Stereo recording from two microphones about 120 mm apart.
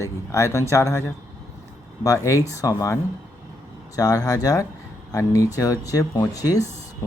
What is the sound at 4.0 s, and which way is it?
Speech, 30° left (ahead or behind).